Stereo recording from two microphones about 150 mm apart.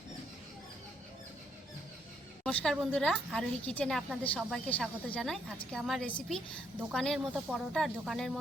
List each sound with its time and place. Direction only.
2.4 s a woman's voice: 10° left (ahead or behind)